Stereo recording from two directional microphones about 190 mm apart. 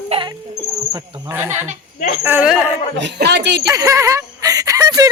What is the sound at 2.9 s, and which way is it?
Speech, 65° right (ahead or behind).